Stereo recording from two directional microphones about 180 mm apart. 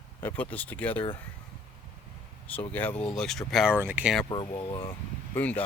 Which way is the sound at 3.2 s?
Centre (ahead or behind).